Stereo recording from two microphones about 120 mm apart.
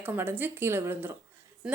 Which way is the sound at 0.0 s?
15° right (ahead or behind).